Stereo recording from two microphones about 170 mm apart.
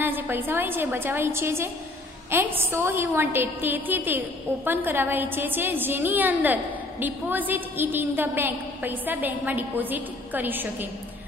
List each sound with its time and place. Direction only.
0.0 s a woman's voice: 10° right (ahead or behind)